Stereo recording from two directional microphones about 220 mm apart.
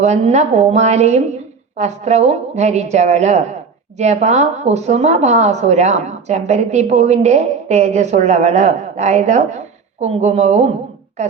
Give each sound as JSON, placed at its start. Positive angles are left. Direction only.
{"t": 0.0, "sound": "a woman's voice", "side_deg": -30}